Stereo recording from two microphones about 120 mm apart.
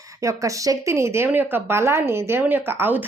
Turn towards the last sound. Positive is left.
turn(degrees=-15)  # may be behind; listen again after turning